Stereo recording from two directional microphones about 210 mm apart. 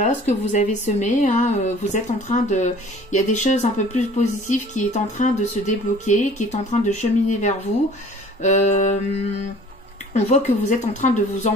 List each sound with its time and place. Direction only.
0.0 s speech: 35° left (ahead or behind)
10.1 s speech: 35° left (ahead or behind)